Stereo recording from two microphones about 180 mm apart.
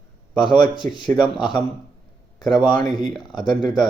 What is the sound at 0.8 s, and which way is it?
Speech, centre (ahead or behind).